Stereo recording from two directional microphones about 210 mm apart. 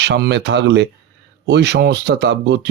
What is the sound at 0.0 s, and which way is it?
Speech, 50° right (ahead or behind).